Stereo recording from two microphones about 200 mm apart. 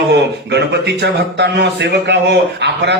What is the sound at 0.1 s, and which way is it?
A man's voice, 55° right (ahead or behind).